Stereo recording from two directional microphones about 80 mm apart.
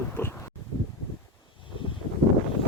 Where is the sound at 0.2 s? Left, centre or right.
Left.